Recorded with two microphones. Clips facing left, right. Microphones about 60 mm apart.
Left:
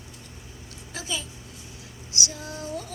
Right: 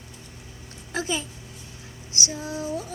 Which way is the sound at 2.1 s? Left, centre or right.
Right.